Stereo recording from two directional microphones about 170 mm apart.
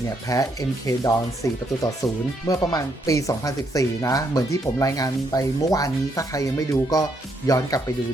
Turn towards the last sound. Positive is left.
turn(degrees=20)  # may be behind; listen again after turning